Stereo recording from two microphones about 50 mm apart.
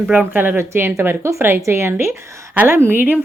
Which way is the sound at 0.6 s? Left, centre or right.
Right.